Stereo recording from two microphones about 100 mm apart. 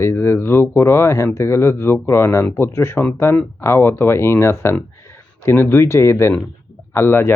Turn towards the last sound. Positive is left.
turn(degrees=25)  # may be behind; listen again after turning